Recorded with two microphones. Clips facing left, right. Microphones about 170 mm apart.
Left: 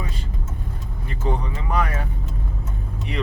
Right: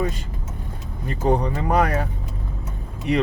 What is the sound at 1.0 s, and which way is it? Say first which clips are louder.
Speech: right 7 dB; 45° right (ahead or behind).